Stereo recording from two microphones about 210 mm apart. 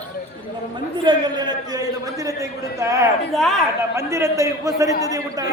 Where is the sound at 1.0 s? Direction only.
20° right (ahead or behind).